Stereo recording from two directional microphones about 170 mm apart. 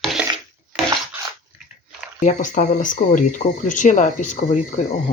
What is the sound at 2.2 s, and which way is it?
Speech, 45° left (ahead or behind).